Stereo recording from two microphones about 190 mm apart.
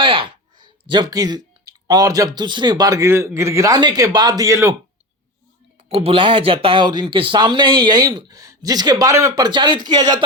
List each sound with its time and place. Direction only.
0.0 s speech: 25° right (ahead or behind)
5.9 s speech: 30° right (ahead or behind)